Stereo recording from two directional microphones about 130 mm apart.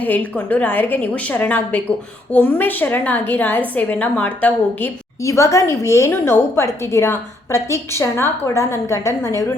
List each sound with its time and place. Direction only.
0.0 s a woman's voice: 10° left (ahead or behind)
5.2 s a woman's voice: 25° left (ahead or behind)